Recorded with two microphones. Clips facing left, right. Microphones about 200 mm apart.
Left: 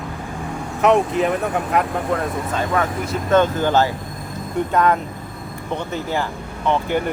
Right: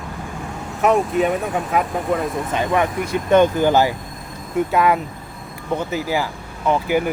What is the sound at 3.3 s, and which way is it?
Speech, 15° right (ahead or behind).